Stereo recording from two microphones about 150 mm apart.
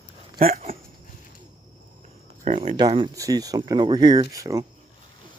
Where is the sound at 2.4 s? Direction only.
50° right (ahead or behind).